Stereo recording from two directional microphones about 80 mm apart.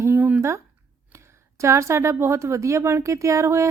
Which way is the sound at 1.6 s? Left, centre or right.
Right.